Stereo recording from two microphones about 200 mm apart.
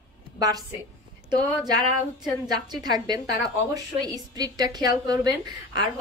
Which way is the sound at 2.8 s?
20° right (ahead or behind).